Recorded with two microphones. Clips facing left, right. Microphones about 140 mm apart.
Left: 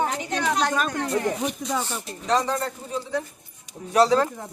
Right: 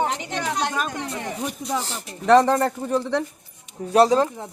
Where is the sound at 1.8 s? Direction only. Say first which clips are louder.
Right 7 dB; 85° right.